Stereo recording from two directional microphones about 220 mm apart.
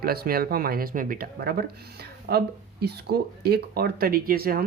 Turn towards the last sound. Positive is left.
turn(degrees=-40)  # may be behind; listen again after turning